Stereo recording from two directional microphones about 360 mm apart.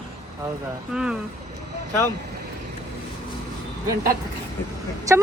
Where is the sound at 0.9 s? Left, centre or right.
Centre.